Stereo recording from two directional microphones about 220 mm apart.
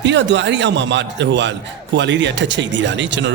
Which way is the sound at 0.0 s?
55° right (ahead or behind).